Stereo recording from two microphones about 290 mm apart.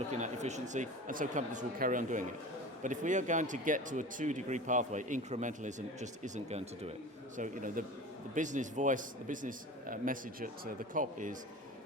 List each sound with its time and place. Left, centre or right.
0.1 s speech: right